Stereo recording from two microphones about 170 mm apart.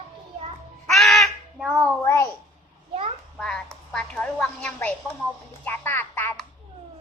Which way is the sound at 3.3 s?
5° left (ahead or behind).